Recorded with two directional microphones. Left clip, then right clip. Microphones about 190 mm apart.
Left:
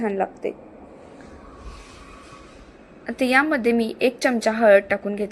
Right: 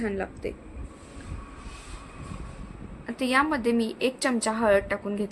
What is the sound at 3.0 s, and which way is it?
A woman's voice, 15° left (ahead or behind).